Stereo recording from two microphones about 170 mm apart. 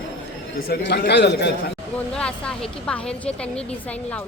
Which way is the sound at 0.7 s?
75° left (ahead or behind).